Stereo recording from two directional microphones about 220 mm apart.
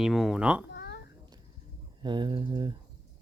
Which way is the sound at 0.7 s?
45° left (ahead or behind).